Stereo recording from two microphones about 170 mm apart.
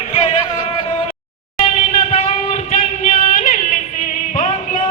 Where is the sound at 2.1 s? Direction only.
40° left (ahead or behind).